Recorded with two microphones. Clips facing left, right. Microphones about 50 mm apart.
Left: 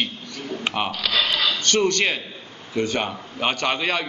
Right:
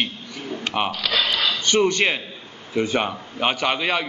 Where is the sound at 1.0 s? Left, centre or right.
Centre.